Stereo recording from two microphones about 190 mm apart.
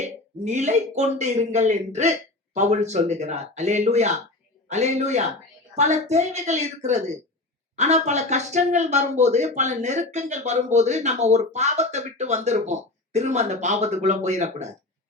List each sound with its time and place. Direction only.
0.0 s speech: 35° right (ahead or behind)